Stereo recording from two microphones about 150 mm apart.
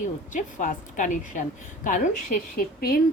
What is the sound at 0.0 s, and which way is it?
A woman's voice, 60° left (ahead or behind).